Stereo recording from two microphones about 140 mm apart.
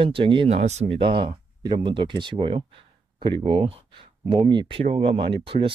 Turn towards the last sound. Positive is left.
turn(degrees=-40)  # may be behind; listen again after turning